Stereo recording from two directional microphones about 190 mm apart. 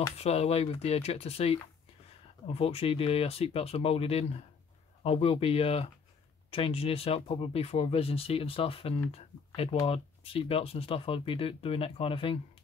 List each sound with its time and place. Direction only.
0.2 s speech: 35° left (ahead or behind)